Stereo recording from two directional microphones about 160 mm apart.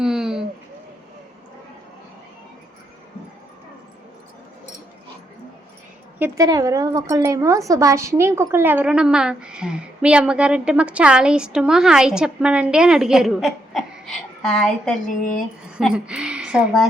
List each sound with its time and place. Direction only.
0.0 s a sound: 5° right (ahead or behind)
6.1 s speech: 15° right (ahead or behind); by 14.9 s 5° left (ahead or behind)
15.0 s speech: 55° left (ahead or behind)
15.8 s a woman's voice: 5° right (ahead or behind)